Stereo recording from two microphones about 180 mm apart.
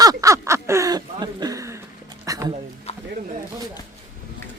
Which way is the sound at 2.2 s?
15° right (ahead or behind).